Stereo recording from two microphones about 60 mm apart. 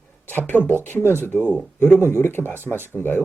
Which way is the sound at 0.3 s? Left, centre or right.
Left.